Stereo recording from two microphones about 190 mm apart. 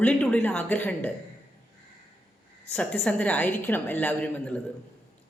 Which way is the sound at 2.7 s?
5° left (ahead or behind).